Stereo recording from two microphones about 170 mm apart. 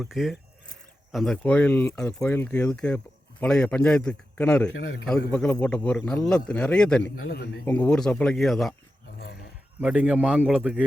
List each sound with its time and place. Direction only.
0.0 s a man's voice: centre (ahead or behind)
7.3 s a man's voice: 70° left (ahead or behind)
7.6 s a man's voice: 10° left (ahead or behind)
9.8 s a man's voice: 10° right (ahead or behind)